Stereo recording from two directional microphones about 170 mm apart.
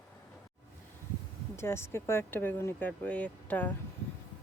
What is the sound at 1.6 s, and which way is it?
Speech, 15° left (ahead or behind).